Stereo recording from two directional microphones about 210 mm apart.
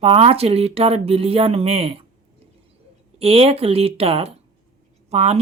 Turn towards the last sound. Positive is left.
turn(degrees=-30)  # may be behind; listen again after turning